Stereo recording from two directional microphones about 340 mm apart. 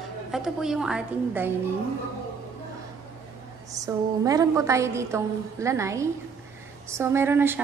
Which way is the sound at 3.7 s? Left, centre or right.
Centre.